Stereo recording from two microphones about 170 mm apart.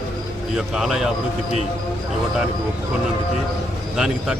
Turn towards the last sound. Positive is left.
turn(degrees=-5)  # may be behind; listen again after turning